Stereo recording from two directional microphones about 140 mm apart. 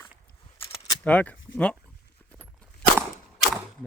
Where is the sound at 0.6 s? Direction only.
20° left (ahead or behind).